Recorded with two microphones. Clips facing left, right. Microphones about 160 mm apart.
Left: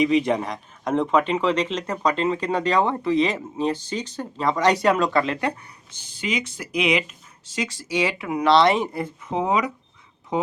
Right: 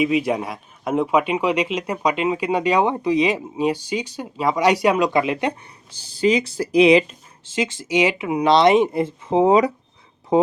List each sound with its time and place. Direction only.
0.0 s speech: 5° right (ahead or behind)
5.9 s speech: 35° right (ahead or behind)